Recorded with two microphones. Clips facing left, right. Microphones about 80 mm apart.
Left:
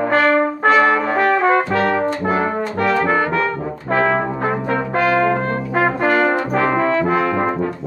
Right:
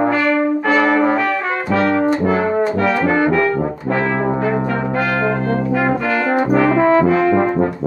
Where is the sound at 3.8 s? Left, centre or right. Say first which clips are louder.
Left 3 dB; left.